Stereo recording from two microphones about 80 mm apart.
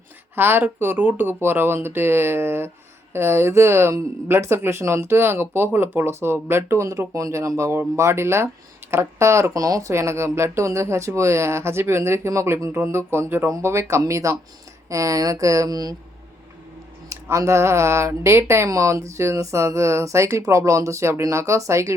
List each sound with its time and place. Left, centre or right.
0.3 s speech: right
17.1 s speech: right
18.7 s speech: right